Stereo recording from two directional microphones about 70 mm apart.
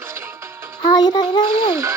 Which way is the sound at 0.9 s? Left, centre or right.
Left.